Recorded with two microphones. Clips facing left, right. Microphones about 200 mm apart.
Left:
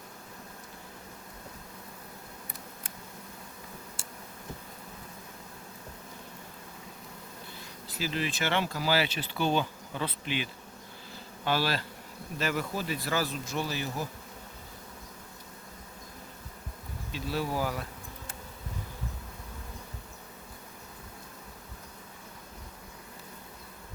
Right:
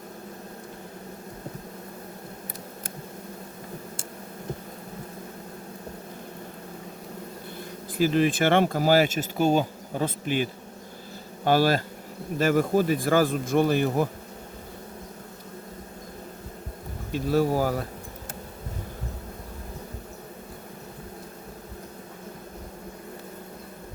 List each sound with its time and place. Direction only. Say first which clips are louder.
7.9 s speech: right 11 dB; 50° right (ahead or behind)
17.1 s speech: right 10 dB; 50° right (ahead or behind)